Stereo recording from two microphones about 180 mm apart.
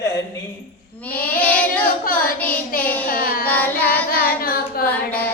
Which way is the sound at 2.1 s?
10° left (ahead or behind).